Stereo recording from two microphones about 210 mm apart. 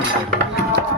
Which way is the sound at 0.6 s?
50° right (ahead or behind).